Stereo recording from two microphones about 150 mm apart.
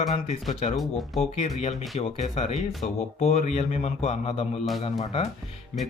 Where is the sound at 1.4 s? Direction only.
45° left (ahead or behind).